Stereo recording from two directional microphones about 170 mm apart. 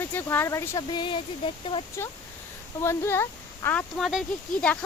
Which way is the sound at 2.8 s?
15° left (ahead or behind).